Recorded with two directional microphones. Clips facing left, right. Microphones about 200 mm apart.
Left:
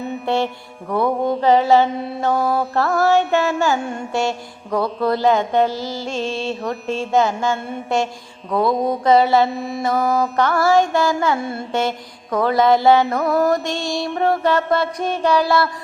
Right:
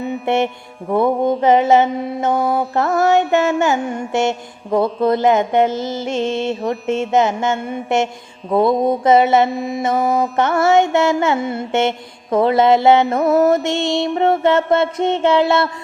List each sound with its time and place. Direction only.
0.0 s mantra: 20° right (ahead or behind)
8.7 s mantra: centre (ahead or behind)
9.0 s mantra: 20° right (ahead or behind)
9.6 s mantra: centre (ahead or behind)
10.3 s mantra: 25° right (ahead or behind)